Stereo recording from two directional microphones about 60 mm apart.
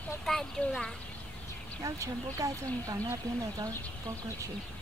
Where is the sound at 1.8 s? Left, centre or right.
Right.